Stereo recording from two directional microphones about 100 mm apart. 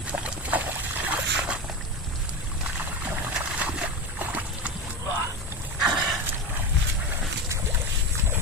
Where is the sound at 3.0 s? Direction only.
15° right (ahead or behind).